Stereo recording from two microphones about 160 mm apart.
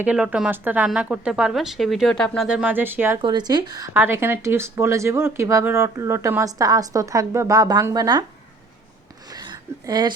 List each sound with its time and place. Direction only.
0.0 s speech: 10° right (ahead or behind)
3.2 s speech: 30° right (ahead or behind)
9.3 s a sound: 25° right (ahead or behind)